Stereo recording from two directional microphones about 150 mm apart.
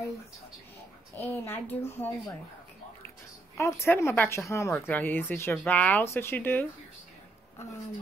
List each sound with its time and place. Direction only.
1.1 s speech: 10° left (ahead or behind)
3.5 s speech: 20° left (ahead or behind)